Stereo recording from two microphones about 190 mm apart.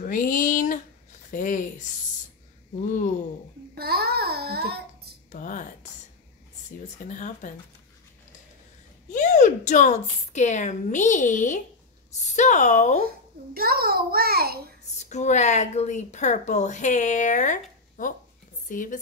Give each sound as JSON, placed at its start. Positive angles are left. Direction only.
{"t": 0.0, "sound": "a sound", "side_deg": 45}
{"t": 1.3, "sound": "speech", "side_deg": 45}
{"t": 1.9, "sound": "a sound", "side_deg": 40}
{"t": 3.7, "sound": "babbling", "side_deg": -55}
{"t": 5.3, "sound": "a sound", "side_deg": 40}
{"t": 7.1, "sound": "speech", "side_deg": 40}
{"t": 9.1, "sound": "a woman's voice", "side_deg": 40}
{"t": 13.0, "sound": "a child's voice", "side_deg": -50}
{"t": 15.0, "sound": "speech", "side_deg": 35}